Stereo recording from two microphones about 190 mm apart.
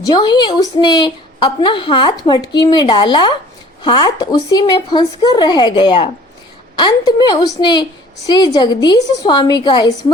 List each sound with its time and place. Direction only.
0.0 s a woman's voice: 20° left (ahead or behind)